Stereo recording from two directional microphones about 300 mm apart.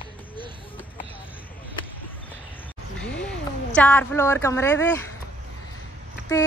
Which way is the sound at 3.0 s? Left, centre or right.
Centre.